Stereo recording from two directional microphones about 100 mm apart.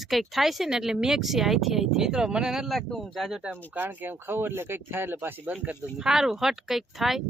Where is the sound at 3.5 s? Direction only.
20° right (ahead or behind).